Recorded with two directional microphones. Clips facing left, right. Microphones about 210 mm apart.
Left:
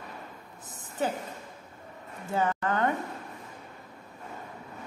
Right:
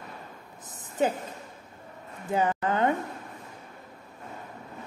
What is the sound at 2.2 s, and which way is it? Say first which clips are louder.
Speech: right 2 dB; 20° right (ahead or behind).